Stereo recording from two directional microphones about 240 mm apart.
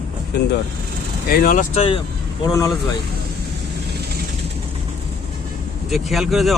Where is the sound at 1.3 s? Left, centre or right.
Left.